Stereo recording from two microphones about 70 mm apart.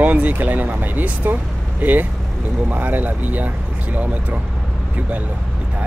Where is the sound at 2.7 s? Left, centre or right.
Right.